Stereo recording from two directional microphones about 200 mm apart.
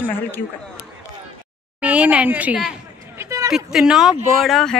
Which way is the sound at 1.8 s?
5° right (ahead or behind).